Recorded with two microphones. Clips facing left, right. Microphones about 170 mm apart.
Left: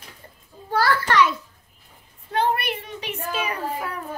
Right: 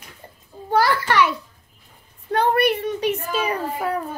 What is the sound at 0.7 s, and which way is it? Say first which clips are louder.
Speech: right 2 dB; 15° right (ahead or behind).